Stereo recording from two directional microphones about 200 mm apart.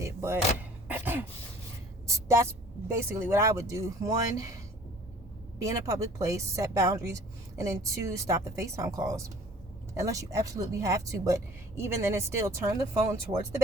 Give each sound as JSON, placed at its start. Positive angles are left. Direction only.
{"t": 0.0, "sound": "door", "side_deg": -15}
{"t": 2.0, "sound": "a woman's voice", "side_deg": -15}
{"t": 5.5, "sound": "a woman's voice", "side_deg": -15}